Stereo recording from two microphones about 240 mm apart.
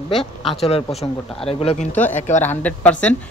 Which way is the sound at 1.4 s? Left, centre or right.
Left.